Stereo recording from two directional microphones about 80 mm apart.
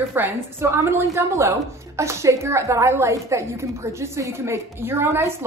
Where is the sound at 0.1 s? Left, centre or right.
Right.